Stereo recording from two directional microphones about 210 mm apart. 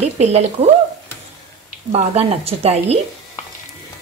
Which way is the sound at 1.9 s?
30° right (ahead or behind).